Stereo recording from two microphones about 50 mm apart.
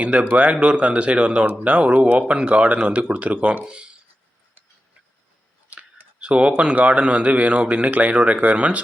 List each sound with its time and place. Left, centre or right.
0.0 s speech: right
5.7 s a sound: right
6.1 s speech: right